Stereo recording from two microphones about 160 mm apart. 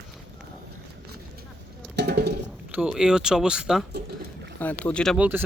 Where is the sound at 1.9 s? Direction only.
90° right.